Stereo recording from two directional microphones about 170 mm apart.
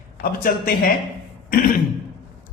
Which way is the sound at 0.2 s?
55° left (ahead or behind).